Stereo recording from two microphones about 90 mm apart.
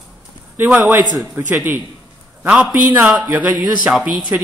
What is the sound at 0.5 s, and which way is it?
Speech, 20° right (ahead or behind).